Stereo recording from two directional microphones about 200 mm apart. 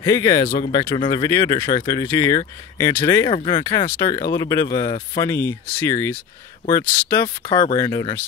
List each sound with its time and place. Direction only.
0.0 s speech: 20° left (ahead or behind)